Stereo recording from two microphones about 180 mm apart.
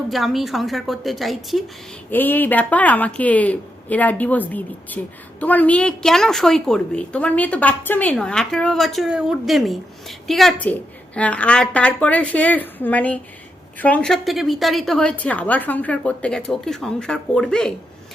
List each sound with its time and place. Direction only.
0.1 s a woman's voice: centre (ahead or behind)
2.0 s a woman's voice: 10° left (ahead or behind)